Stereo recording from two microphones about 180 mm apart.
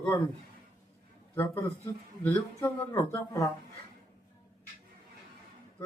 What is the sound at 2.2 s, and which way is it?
Speech, 10° left (ahead or behind).